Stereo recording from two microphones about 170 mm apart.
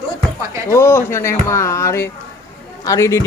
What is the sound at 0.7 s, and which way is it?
A man's voice, 15° left (ahead or behind).